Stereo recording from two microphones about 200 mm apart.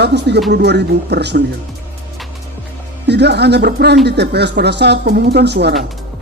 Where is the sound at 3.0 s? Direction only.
60° right (ahead or behind).